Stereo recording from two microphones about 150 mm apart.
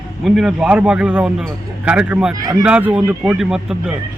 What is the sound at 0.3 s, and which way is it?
A man's voice, centre (ahead or behind).